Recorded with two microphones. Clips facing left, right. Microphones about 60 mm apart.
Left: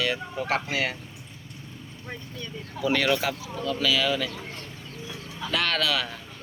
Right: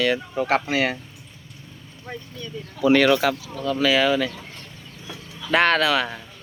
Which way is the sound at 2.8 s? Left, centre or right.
Right.